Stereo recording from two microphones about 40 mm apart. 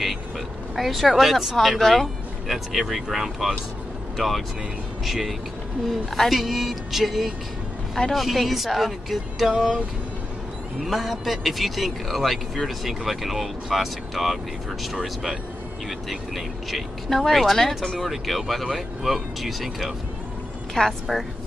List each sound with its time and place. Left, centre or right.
0.7 s speech: centre
10.9 s speech: centre
16.1 s speech: centre
20.8 s a woman's voice: centre